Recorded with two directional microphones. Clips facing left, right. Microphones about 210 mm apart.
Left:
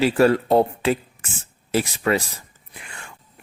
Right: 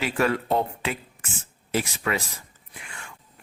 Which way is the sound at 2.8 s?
35° left (ahead or behind).